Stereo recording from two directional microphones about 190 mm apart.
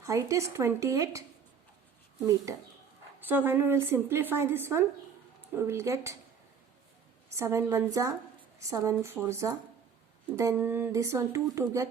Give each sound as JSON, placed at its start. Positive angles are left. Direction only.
{"t": 0.0, "sound": "a woman's voice", "side_deg": -15}
{"t": 3.2, "sound": "a woman's voice", "side_deg": -10}
{"t": 7.3, "sound": "a woman's voice", "side_deg": -15}